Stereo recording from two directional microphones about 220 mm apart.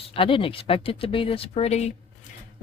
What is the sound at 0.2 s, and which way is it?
Speech, 25° left (ahead or behind).